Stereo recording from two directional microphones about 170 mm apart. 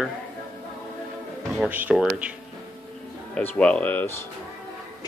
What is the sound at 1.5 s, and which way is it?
Speech, 5° right (ahead or behind).